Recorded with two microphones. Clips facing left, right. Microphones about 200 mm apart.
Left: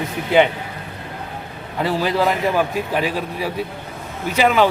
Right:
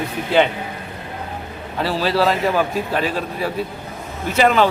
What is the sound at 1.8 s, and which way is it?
A man's voice, 15° left (ahead or behind).